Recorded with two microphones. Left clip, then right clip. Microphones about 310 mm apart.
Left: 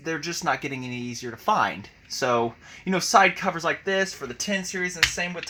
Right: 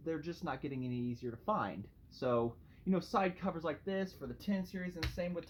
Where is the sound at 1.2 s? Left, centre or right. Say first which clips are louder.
Left 15 dB; left.